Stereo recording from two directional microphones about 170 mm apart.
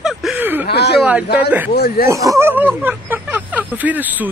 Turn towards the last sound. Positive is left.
turn(degrees=-10)  # may be behind; listen again after turning